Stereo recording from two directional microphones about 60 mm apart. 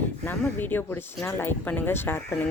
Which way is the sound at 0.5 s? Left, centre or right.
Left.